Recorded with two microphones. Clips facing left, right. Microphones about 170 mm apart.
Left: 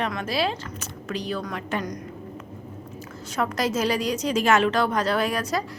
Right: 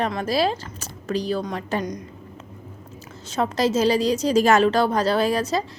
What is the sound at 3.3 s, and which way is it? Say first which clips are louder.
A woman's voice: right 4 dB; 25° right (ahead or behind).